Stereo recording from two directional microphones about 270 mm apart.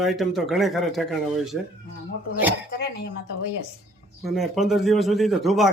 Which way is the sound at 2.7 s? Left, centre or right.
Left.